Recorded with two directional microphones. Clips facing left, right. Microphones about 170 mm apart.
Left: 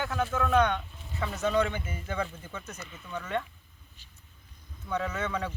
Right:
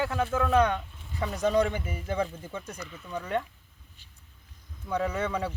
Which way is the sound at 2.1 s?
35° right (ahead or behind).